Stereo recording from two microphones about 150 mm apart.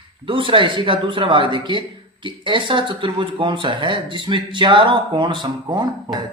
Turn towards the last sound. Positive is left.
turn(degrees=-30)  # may be behind; listen again after turning